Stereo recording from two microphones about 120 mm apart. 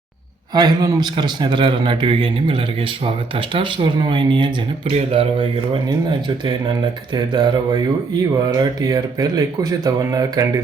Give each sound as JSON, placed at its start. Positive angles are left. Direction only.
{"t": 0.5, "sound": "a man's voice", "side_deg": -35}
{"t": 4.9, "sound": "speech", "side_deg": -55}
{"t": 6.1, "sound": "a man's voice", "side_deg": -40}